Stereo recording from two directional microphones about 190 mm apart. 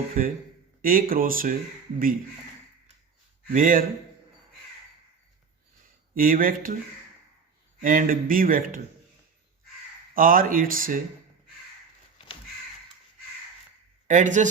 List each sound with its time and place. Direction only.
0.2 s speech: 45° right (ahead or behind)
3.4 s speech: 45° right (ahead or behind)
6.1 s speech: 50° right (ahead or behind)
7.8 s speech: 45° right (ahead or behind)
10.2 s speech: 45° right (ahead or behind)
14.1 s speech: 40° right (ahead or behind)